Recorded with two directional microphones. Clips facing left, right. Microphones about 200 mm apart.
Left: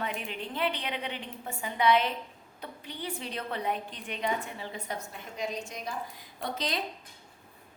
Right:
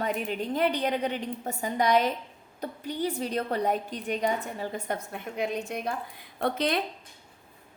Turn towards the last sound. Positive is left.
turn(degrees=-60)  # may be behind; listen again after turning